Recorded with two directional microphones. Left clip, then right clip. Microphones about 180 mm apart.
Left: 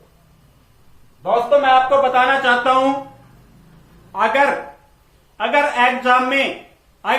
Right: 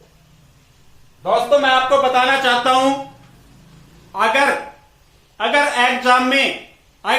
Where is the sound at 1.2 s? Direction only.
20° right (ahead or behind).